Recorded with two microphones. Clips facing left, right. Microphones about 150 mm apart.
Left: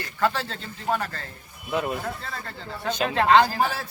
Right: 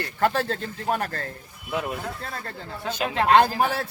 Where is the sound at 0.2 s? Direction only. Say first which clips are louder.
Right 2 dB; 55° right (ahead or behind).